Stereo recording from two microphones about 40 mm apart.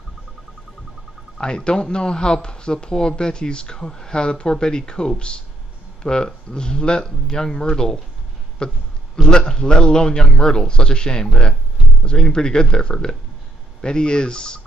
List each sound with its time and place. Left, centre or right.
1.4 s speech: left